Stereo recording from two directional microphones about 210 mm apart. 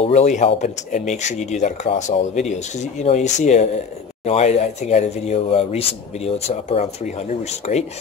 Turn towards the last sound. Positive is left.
turn(degrees=30)  # may be behind; listen again after turning